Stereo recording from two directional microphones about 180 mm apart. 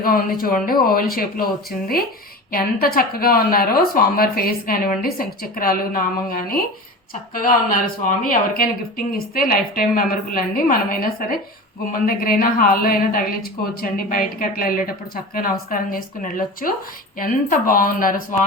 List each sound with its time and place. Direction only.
0.0 s a woman's voice: 55° left (ahead or behind)
2.5 s a woman's voice: 55° left (ahead or behind)